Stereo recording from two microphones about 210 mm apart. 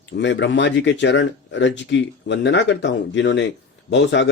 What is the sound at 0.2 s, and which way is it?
Speech, 60° left (ahead or behind).